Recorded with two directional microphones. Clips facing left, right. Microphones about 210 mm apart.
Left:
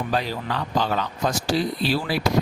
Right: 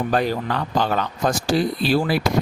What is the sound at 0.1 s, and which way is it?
Speech, 50° right (ahead or behind).